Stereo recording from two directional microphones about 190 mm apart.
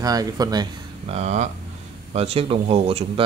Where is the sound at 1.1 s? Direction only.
35° right (ahead or behind).